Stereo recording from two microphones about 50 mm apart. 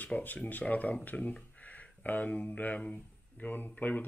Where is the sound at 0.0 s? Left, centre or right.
Left.